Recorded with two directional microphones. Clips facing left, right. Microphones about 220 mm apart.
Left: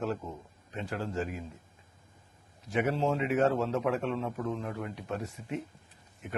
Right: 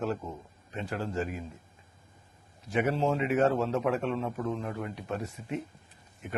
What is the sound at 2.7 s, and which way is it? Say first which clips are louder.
A man's voice: right 1 dB; 15° right (ahead or behind).